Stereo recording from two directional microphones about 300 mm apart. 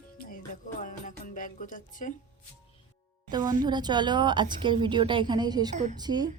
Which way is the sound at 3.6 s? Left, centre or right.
Centre.